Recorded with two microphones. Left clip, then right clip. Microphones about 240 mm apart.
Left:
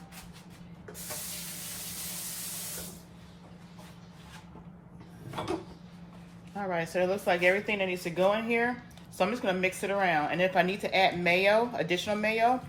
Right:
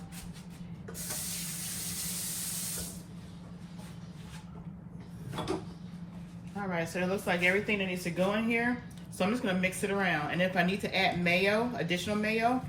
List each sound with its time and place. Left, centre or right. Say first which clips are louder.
6.7 s a woman's voice: left 4 dB; left